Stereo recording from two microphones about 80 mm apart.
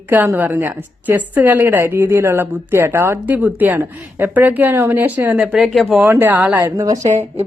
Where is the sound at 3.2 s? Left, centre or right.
Right.